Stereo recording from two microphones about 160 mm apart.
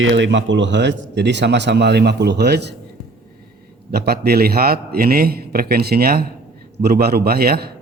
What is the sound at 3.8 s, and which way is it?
A man's voice, 80° right.